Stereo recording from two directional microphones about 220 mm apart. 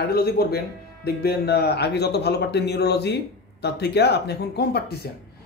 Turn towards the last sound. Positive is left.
turn(degrees=50)  # may be behind; listen again after turning